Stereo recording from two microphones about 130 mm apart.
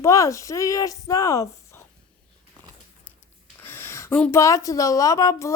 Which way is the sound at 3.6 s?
20° left (ahead or behind).